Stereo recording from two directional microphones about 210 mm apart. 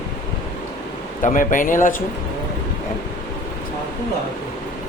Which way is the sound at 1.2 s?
40° left (ahead or behind).